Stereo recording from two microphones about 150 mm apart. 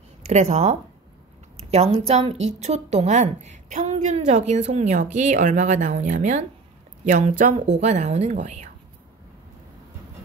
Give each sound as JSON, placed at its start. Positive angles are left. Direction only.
{"t": 0.2, "sound": "a woman's voice", "side_deg": -50}